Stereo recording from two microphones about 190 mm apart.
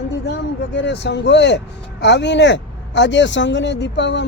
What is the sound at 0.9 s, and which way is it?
Speech, 65° left (ahead or behind).